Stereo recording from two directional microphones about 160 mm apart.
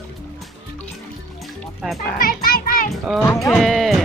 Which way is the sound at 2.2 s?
70° left (ahead or behind).